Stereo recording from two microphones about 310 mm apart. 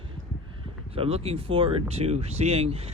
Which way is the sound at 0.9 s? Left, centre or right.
Centre.